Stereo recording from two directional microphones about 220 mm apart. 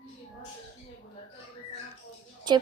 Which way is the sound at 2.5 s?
20° right (ahead or behind).